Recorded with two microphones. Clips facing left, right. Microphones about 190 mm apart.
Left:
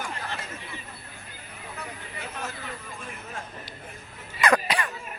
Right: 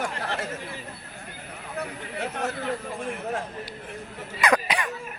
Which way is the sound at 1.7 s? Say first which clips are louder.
Right 9 dB; 65° right (ahead or behind).